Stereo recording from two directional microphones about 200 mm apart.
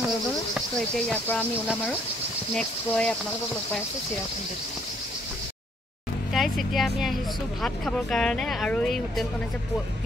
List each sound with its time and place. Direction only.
0.6 s speech: 5° left (ahead or behind)
2.5 s speech: 5° left (ahead or behind)
6.3 s speech: centre (ahead or behind)